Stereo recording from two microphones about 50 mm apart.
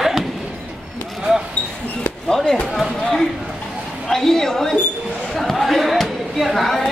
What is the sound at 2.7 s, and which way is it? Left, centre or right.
A woman's voice, centre.